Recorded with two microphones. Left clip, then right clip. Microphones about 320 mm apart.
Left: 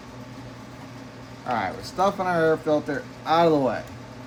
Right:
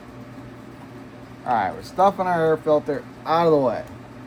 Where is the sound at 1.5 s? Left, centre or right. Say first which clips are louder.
Right 5 dB; centre.